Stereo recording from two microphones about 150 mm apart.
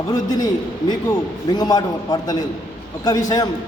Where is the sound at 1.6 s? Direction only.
25° left (ahead or behind).